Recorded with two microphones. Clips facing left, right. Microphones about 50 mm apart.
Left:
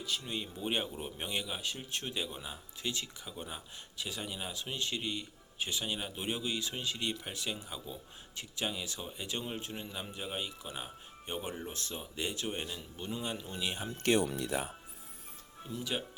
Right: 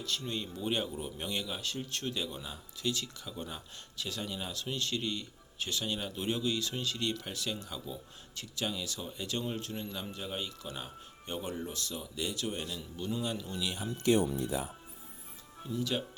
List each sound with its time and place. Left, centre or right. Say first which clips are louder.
0.0 s speech: right 1 dB; centre
11.7 s a man's voice: right 2 dB; left
14.0 s speech: right 2 dB; left
15.7 s speech: right 3 dB; centre